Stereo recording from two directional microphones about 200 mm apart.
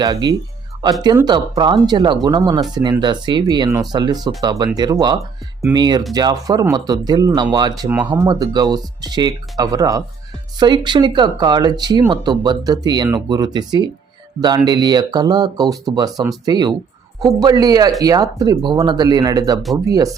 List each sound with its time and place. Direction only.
0.0 s speech: 20° right (ahead or behind)
7.9 s speech: 10° right (ahead or behind)
8.3 s speech: 20° right (ahead or behind)